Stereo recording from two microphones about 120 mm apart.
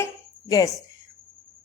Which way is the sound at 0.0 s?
30° left (ahead or behind).